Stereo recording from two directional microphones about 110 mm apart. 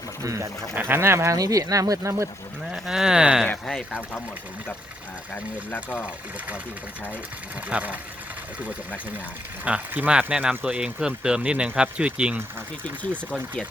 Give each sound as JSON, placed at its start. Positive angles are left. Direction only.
{"t": 0.2, "sound": "speech", "side_deg": -30}
{"t": 2.7, "sound": "speech", "side_deg": -5}
{"t": 3.4, "sound": "speech", "side_deg": 10}
{"t": 5.7, "sound": "speech", "side_deg": 15}
{"t": 7.7, "sound": "speech", "side_deg": -10}
{"t": 9.6, "sound": "speech", "side_deg": -15}